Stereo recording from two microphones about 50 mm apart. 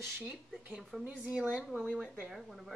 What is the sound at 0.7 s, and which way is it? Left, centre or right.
Speech, centre.